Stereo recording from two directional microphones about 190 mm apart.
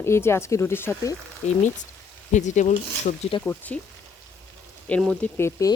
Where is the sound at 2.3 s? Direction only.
40° left (ahead or behind).